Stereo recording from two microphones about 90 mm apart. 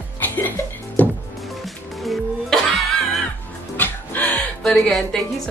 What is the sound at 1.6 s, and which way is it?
Music, centre (ahead or behind).